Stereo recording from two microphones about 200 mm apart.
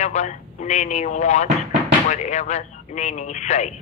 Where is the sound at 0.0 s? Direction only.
35° left (ahead or behind).